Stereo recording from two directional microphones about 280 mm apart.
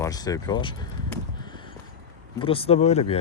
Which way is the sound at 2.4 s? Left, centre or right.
Left.